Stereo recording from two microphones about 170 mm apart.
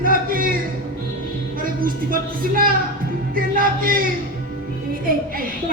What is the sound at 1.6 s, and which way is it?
A woman's voice, 55° right (ahead or behind).